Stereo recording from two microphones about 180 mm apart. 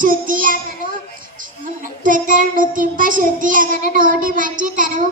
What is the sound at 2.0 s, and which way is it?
Child singing, 50° right (ahead or behind).